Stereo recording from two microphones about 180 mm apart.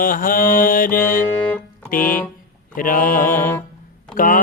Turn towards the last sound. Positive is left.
turn(degrees=50)  # may be behind; listen again after turning